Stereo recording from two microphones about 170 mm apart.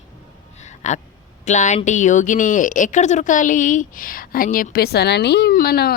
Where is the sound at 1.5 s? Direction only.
45° left (ahead or behind).